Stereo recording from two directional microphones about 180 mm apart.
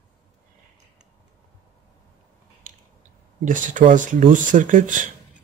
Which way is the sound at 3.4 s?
45° right (ahead or behind).